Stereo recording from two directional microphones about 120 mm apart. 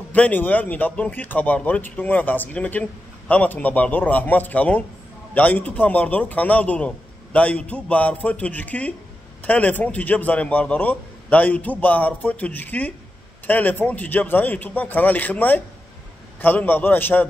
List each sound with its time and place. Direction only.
0.1 s a man's voice: 15° left (ahead or behind)